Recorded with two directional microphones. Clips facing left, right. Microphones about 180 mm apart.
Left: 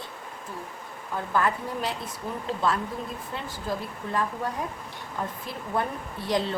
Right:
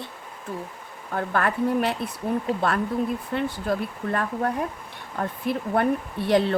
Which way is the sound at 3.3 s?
60° right (ahead or behind).